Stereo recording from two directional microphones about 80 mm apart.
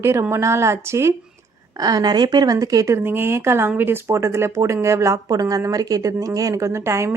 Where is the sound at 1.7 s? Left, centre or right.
Right.